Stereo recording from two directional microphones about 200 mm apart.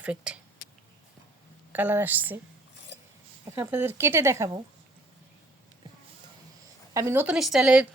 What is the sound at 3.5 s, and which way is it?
Speech, 10° right (ahead or behind).